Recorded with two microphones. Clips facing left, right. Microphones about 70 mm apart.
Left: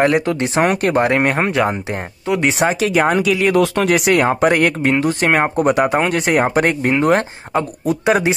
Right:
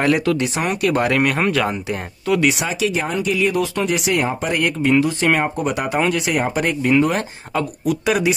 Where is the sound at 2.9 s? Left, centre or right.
Left.